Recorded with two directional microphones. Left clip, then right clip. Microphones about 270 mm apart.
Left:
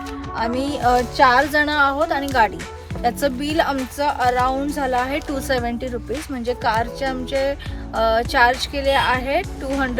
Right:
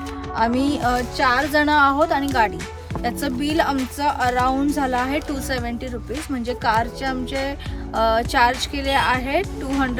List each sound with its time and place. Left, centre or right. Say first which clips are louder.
0.3 s a woman's voice: right 2 dB; centre